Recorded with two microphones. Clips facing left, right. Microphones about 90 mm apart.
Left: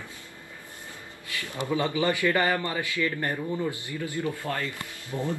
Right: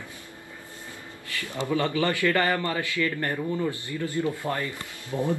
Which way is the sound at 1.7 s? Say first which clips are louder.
Even; 20° left (ahead or behind).